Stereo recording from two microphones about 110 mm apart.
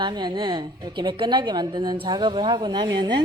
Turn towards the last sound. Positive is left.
turn(degrees=-40)  # may be behind; listen again after turning